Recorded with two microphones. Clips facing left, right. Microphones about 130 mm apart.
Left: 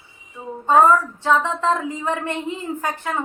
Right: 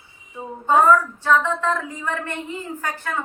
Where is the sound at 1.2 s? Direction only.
20° left (ahead or behind).